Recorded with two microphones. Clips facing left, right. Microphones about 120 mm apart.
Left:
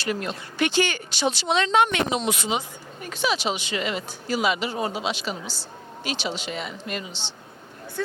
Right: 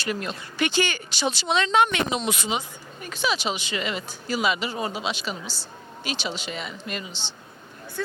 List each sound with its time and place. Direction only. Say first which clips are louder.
0.1 s speech: left 2 dB; 50° left (ahead or behind); by 7.3 s 70° left (ahead or behind)